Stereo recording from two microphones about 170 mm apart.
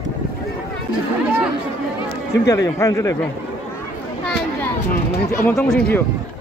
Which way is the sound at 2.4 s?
20° left (ahead or behind).